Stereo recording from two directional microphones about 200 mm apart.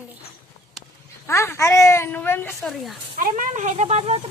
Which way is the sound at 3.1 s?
40° right (ahead or behind).